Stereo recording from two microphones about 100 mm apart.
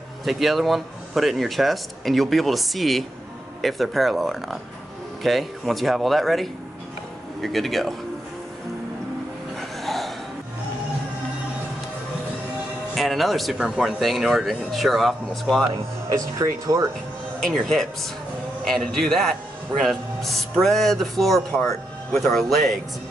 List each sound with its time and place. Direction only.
0.2 s speech: centre (ahead or behind)
9.6 s a sound: centre (ahead or behind)
12.9 s speech: centre (ahead or behind)
16.1 s speech: 35° right (ahead or behind)
17.4 s speech: 5° left (ahead or behind)